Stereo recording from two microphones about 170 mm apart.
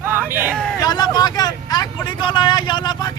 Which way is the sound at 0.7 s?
25° left (ahead or behind).